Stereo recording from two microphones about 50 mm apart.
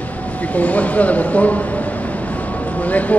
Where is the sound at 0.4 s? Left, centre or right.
Left.